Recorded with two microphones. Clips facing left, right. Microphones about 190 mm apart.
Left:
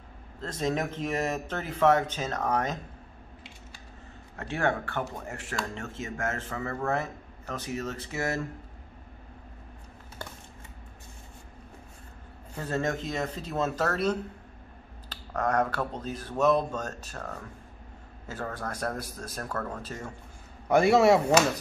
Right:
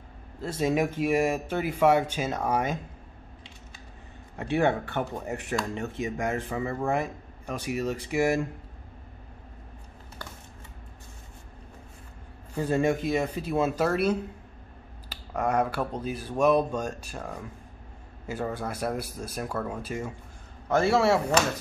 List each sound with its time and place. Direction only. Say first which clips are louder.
0.4 s a man's voice: right 4 dB; 10° right (ahead or behind)
4.4 s a man's voice: right 4 dB; 15° right (ahead or behind)
12.5 s a man's voice: right 5 dB; 10° right (ahead or behind)
20.6 s speech: left 2 dB; 15° left (ahead or behind)